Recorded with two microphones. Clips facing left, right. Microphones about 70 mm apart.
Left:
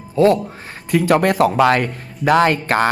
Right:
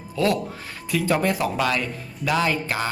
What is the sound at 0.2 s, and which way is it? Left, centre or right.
Speech, left.